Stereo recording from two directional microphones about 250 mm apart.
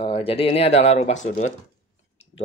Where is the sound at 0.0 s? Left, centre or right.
Left.